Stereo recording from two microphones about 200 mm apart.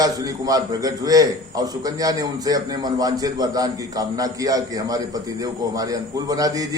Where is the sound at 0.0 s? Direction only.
20° right (ahead or behind).